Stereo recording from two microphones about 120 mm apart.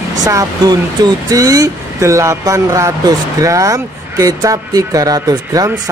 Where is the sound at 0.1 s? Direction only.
30° right (ahead or behind).